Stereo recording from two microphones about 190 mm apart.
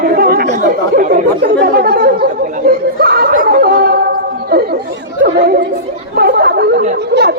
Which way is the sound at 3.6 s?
55° right (ahead or behind).